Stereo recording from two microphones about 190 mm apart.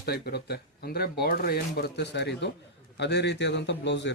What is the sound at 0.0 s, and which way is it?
A man's voice, 55° left (ahead or behind).